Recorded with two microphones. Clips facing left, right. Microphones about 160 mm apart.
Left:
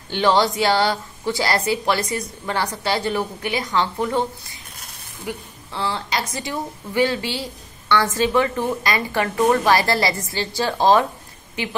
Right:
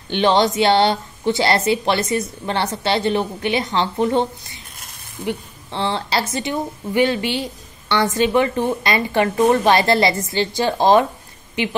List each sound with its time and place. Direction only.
0.1 s a woman's voice: 20° right (ahead or behind)
6.4 s a woman's voice: 20° right (ahead or behind)